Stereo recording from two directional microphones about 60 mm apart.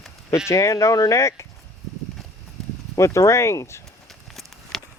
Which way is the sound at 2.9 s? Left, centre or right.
Left.